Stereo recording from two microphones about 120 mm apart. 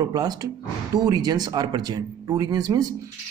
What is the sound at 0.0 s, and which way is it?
Speech, 35° right (ahead or behind).